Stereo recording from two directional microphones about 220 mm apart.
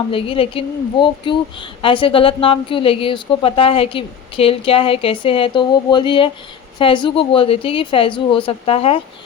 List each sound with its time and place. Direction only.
0.1 s a woman's voice: 25° left (ahead or behind)